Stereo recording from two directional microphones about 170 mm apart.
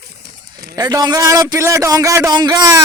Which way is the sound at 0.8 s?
25° right (ahead or behind).